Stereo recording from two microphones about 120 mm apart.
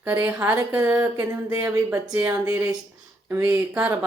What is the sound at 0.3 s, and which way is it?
Speech, 15° right (ahead or behind).